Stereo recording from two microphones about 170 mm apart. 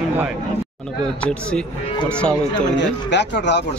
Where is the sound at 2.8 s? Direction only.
90° left.